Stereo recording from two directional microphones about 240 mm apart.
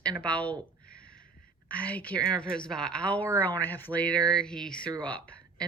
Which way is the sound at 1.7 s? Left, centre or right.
Centre.